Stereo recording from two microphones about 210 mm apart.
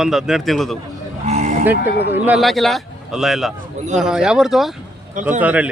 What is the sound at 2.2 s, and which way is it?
Speech, centre (ahead or behind).